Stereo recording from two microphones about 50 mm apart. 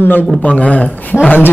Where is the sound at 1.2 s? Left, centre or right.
Left.